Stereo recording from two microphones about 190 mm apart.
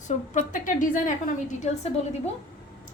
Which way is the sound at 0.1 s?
40° left (ahead or behind).